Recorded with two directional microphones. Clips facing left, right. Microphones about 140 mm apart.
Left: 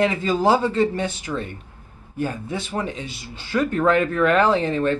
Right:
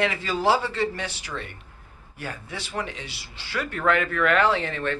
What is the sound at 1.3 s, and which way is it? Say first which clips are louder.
Speech: left 7 dB; 20° left (ahead or behind).